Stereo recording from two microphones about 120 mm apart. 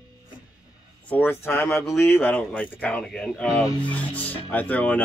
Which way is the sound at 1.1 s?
15° left (ahead or behind).